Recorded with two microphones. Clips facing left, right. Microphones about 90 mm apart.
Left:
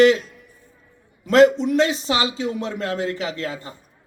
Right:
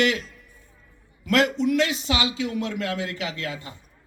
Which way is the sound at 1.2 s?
30° left (ahead or behind).